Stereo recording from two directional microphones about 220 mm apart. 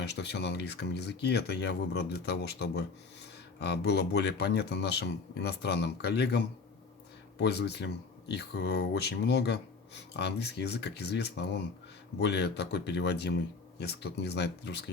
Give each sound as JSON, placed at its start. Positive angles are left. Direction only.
{"t": 0.0, "sound": "speech", "side_deg": 50}